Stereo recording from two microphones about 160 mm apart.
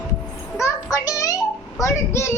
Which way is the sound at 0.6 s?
20° left (ahead or behind).